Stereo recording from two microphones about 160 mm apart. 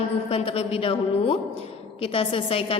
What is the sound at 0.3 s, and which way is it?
A woman's voice, 40° left (ahead or behind).